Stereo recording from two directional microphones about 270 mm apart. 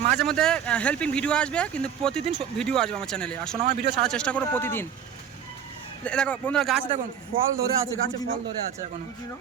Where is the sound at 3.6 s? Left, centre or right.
Right.